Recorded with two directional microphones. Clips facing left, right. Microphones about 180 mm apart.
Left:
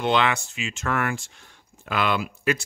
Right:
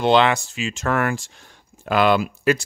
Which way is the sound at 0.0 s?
30° right (ahead or behind).